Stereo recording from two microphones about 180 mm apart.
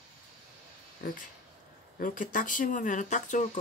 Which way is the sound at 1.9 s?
50° left (ahead or behind).